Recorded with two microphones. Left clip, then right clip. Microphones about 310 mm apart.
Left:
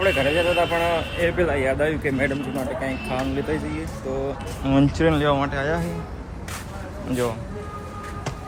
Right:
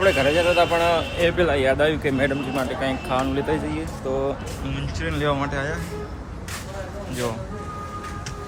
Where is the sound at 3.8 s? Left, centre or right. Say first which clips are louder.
Right 3 dB; centre.